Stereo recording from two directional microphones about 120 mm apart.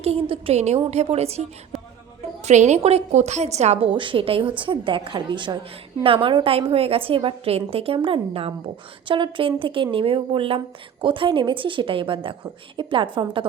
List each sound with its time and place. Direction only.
0.0 s a woman's voice: 55° right (ahead or behind)
2.4 s a woman's voice: 75° right (ahead or behind); by 13.5 s 45° right (ahead or behind)